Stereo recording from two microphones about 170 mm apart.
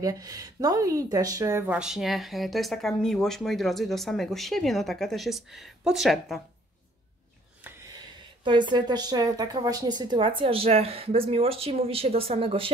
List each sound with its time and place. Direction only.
0.0 s speech: 20° right (ahead or behind)
1.7 s speech: 5° right (ahead or behind)
7.6 s a sound: 10° right (ahead or behind)
8.5 s a woman's voice: 25° right (ahead or behind)